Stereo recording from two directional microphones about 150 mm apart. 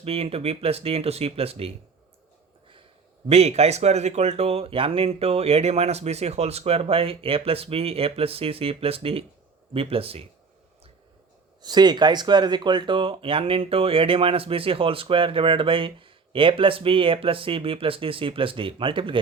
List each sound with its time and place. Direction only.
0.0 s speech: 40° right (ahead or behind)
3.2 s speech: 45° right (ahead or behind)
11.6 s speech: 30° right (ahead or behind)